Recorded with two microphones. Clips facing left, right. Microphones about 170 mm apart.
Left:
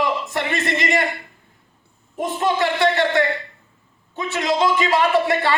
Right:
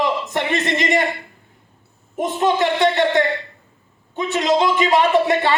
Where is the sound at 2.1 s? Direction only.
20° right (ahead or behind).